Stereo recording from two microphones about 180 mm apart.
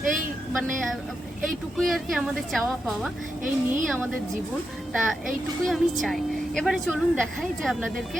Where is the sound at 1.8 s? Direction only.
Centre (ahead or behind).